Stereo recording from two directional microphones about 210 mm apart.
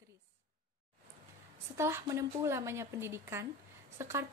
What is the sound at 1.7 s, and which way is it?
Speech, 10° right (ahead or behind).